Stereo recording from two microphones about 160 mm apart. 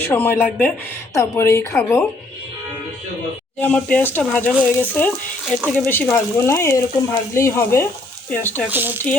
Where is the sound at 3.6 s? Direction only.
10° left (ahead or behind).